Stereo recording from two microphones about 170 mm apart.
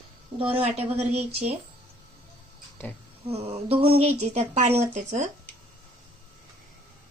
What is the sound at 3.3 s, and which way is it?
Speech, 35° right (ahead or behind).